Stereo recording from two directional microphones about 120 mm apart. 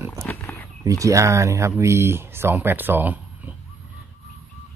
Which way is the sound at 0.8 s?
25° right (ahead or behind).